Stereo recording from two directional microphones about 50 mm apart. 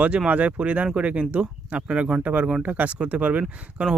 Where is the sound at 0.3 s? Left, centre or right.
Right.